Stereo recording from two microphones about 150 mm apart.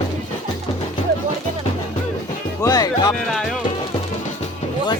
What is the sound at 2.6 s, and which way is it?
Music, 25° left (ahead or behind).